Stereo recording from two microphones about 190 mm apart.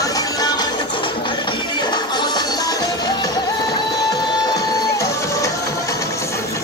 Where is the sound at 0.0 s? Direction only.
20° left (ahead or behind).